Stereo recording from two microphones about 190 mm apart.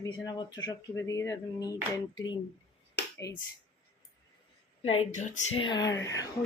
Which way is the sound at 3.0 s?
60° left (ahead or behind).